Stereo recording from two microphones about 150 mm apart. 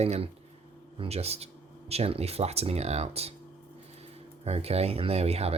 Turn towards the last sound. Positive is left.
turn(degrees=-45)  # may be behind; listen again after turning